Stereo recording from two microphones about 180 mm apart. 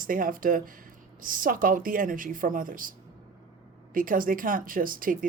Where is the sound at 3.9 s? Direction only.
50° right (ahead or behind).